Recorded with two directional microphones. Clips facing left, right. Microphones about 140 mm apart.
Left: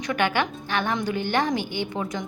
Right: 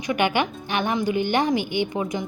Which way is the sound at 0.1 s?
15° right (ahead or behind).